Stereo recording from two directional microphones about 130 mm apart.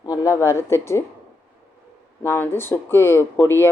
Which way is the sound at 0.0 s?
30° left (ahead or behind).